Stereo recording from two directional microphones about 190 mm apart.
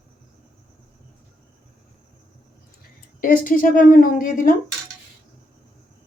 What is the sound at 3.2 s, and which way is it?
A woman's voice, 45° left (ahead or behind).